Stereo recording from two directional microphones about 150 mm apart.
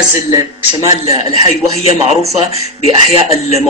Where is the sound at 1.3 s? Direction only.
45° left (ahead or behind).